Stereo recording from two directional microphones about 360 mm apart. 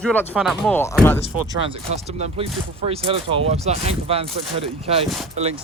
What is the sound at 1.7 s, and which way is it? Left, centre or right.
Speech, centre.